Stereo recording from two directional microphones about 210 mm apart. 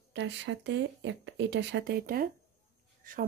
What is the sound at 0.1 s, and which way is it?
A woman's voice, 60° right (ahead or behind).